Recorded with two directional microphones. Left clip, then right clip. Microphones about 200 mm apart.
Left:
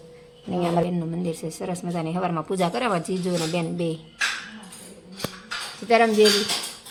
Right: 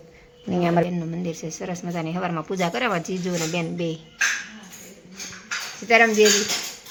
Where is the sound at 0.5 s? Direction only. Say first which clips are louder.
Right 2 dB; 15° right (ahead or behind).